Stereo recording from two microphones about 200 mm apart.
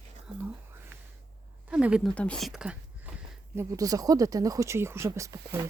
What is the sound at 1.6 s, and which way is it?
Speech, 5° right (ahead or behind).